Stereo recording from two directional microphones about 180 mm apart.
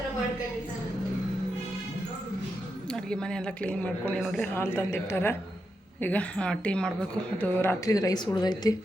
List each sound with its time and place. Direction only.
2.9 s a woman's voice: 5° left (ahead or behind); by 8.7 s 20° left (ahead or behind)